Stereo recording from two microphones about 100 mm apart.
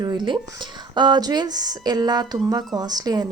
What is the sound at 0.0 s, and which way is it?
A woman's voice, 45° right (ahead or behind).